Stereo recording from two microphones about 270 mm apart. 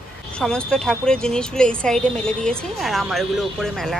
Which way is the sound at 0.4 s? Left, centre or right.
Centre.